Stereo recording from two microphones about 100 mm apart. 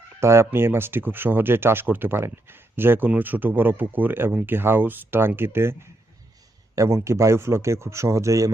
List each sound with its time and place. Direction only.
0.2 s speech: 25° right (ahead or behind)